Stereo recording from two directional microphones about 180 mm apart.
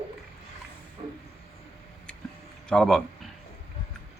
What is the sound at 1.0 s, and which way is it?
Train, 25° right (ahead or behind).